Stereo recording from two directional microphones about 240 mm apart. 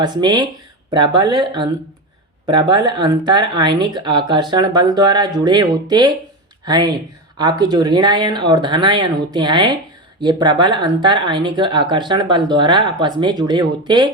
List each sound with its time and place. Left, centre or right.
0.0 s speech: centre